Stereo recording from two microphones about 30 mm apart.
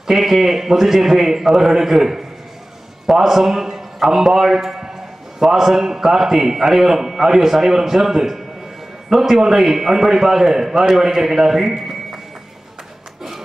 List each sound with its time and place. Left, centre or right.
0.0 s a man's voice: centre
3.3 s a man's voice: centre